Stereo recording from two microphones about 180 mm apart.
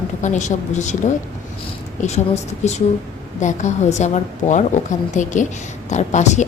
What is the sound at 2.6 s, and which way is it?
A woman's voice, 40° left (ahead or behind).